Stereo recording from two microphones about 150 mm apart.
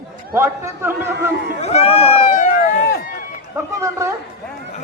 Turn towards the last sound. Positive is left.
turn(degrees=-20)  # may be behind; listen again after turning